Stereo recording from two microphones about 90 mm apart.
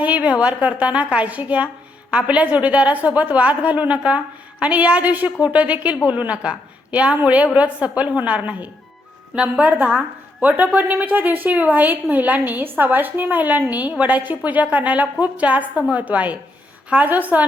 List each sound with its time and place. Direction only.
0.0 s a woman's voice: 15° right (ahead or behind)